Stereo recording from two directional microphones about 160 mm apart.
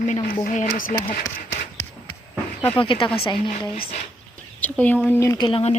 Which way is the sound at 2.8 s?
35° left (ahead or behind).